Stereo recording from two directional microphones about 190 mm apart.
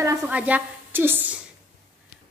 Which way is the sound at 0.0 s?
15° right (ahead or behind).